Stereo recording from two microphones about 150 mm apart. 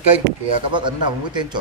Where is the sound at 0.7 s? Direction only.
30° right (ahead or behind).